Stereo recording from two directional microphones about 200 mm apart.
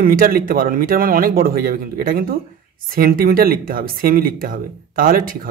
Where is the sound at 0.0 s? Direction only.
45° right (ahead or behind).